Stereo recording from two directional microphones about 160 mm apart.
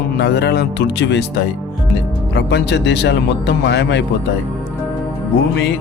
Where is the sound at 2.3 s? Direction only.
90° left.